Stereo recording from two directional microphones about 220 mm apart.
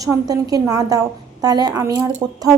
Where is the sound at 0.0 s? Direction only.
15° right (ahead or behind).